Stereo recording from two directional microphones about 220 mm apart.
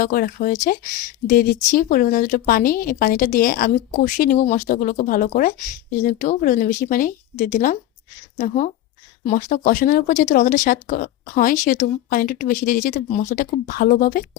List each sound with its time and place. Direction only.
0.0 s speech: 40° left (ahead or behind)